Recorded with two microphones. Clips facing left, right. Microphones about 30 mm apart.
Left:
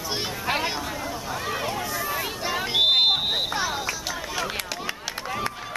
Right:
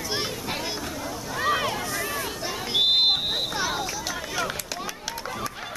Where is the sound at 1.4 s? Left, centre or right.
Centre.